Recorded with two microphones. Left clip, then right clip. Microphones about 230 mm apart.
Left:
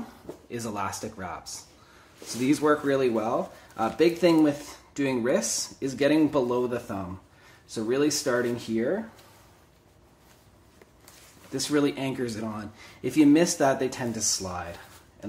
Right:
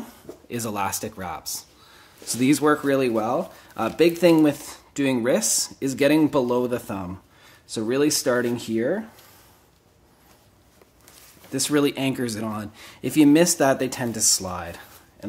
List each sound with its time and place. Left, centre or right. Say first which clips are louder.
0.5 s speech: right 5 dB; right
11.5 s speech: right 4 dB; right